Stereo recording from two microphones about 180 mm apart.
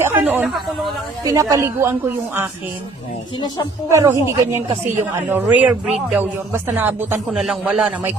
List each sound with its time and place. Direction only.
0.0 s a sound: 10° right (ahead or behind)
1.2 s a man's voice: 20° right (ahead or behind)
3.8 s a man's voice: 15° right (ahead or behind)